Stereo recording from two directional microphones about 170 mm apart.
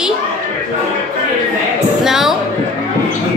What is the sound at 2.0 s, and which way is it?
Speech, centre (ahead or behind).